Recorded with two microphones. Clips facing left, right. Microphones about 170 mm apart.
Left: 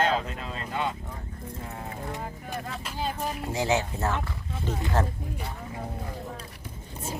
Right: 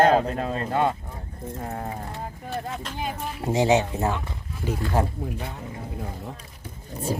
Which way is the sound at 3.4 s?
20° right (ahead or behind).